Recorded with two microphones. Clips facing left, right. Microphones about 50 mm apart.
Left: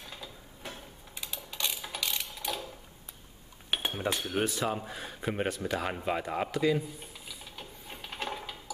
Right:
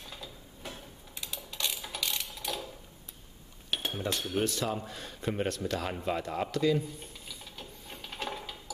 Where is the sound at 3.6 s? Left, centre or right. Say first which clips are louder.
Left 2 dB; centre.